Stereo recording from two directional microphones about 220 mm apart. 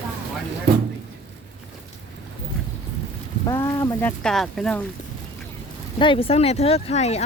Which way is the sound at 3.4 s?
15° left (ahead or behind).